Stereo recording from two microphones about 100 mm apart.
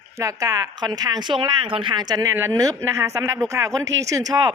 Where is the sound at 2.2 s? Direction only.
30° right (ahead or behind).